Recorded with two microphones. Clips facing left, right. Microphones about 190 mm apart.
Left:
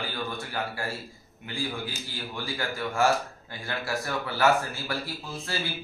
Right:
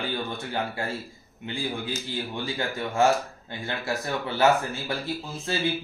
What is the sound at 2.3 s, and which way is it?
A man's voice, 20° right (ahead or behind).